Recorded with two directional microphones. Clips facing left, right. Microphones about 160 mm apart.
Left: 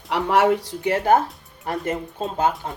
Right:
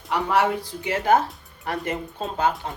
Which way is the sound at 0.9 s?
50° left (ahead or behind).